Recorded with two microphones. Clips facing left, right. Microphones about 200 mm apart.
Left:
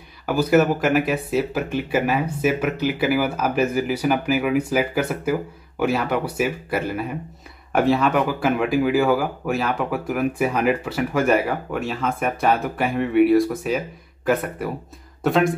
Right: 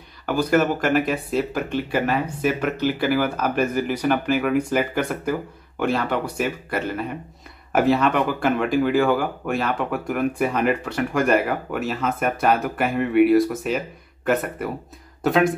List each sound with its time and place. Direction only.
0.3 s speech: 10° left (ahead or behind)